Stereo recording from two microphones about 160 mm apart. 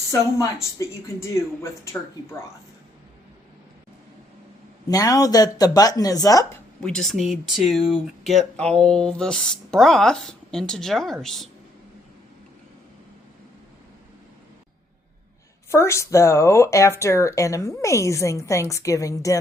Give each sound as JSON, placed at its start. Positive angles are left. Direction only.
{"t": 0.3, "sound": "speech", "side_deg": 20}
{"t": 4.9, "sound": "speech", "side_deg": 25}
{"t": 6.8, "sound": "speech", "side_deg": 5}
{"t": 15.7, "sound": "speech", "side_deg": 15}